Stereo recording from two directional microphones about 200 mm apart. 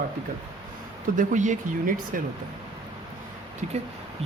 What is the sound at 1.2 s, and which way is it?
Speech, 40° right (ahead or behind).